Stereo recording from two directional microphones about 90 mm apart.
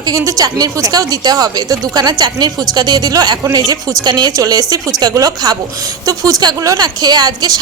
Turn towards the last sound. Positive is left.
turn(degrees=-45)  # may be behind; listen again after turning